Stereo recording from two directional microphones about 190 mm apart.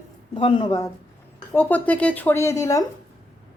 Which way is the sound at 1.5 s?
10° left (ahead or behind).